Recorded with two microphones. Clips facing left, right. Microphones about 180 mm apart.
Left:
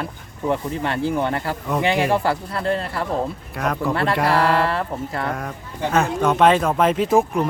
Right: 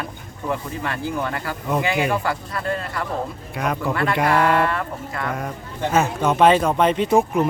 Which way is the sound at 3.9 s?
30° left (ahead or behind).